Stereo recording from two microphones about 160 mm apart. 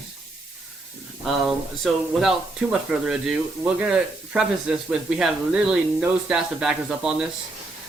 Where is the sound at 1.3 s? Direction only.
Centre (ahead or behind).